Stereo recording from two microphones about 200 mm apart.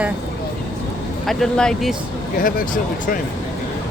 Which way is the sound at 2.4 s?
45° left (ahead or behind).